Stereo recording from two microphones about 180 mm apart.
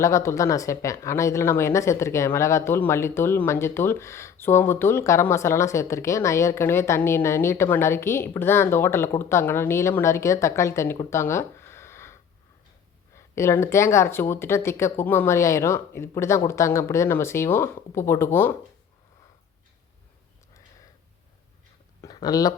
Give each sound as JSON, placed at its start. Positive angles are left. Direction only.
{"t": 0.0, "sound": "speech", "side_deg": 15}
{"t": 13.1, "sound": "speech", "side_deg": 15}
{"t": 22.0, "sound": "speech", "side_deg": 20}